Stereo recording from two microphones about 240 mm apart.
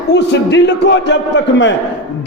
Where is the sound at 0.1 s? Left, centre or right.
Left.